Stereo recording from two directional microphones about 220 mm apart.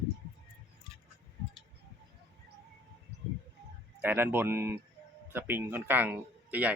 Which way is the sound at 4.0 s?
10° right (ahead or behind).